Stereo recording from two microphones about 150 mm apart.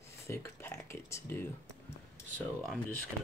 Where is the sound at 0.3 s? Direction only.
15° left (ahead or behind).